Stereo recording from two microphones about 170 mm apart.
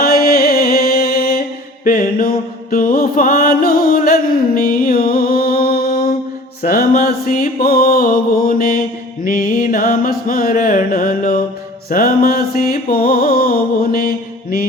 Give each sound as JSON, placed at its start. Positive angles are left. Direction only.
{"t": 0.0, "sound": "music", "side_deg": 65}
{"t": 6.6, "sound": "mantra", "side_deg": 60}
{"t": 11.9, "sound": "music", "side_deg": 60}